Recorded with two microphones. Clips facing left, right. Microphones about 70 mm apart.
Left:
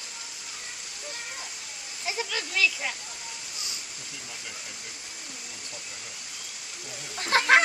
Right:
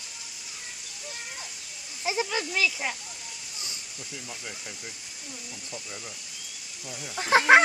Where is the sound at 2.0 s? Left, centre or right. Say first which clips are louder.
Right 4 dB; centre.